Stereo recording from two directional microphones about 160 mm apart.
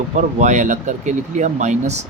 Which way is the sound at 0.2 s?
50° right (ahead or behind).